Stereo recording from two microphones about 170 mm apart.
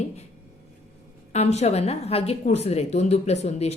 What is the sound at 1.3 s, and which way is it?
Speech, 40° left (ahead or behind).